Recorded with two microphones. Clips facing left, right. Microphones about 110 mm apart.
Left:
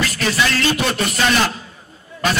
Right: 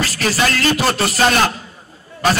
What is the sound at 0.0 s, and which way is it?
Music, 35° right (ahead or behind).